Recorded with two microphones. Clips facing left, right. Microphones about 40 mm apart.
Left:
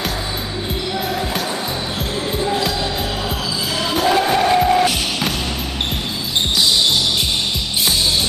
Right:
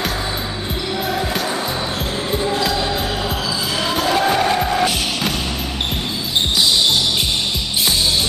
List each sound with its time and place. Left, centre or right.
2.3 s music: centre
3.9 s music: centre